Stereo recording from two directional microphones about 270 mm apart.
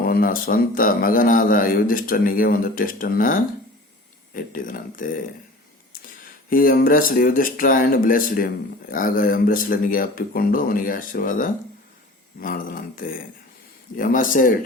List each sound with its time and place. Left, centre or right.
0.0 s speech: left
6.5 s speech: left